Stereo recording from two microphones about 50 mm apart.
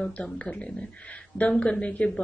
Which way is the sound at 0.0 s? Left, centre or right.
Left.